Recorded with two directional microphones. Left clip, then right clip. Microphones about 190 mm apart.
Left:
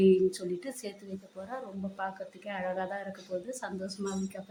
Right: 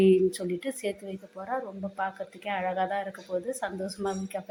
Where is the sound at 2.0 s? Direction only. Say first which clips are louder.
Right 5 dB; 15° right (ahead or behind).